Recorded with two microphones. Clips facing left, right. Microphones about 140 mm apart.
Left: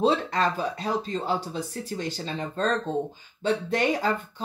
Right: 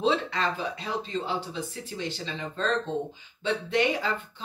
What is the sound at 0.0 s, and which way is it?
Speech, 45° left (ahead or behind).